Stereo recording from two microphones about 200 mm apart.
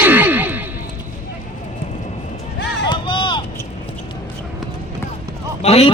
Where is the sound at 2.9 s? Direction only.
25° left (ahead or behind).